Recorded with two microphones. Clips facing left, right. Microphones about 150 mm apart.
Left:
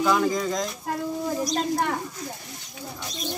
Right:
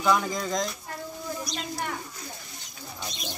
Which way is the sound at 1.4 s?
40° left (ahead or behind).